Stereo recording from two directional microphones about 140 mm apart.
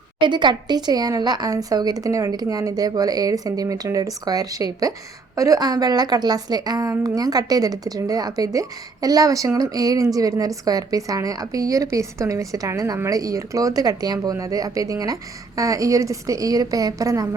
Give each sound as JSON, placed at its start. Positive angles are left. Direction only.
{"t": 0.2, "sound": "speech", "side_deg": -35}